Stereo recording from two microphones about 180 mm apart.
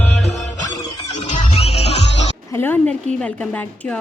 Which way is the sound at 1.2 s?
40° left (ahead or behind).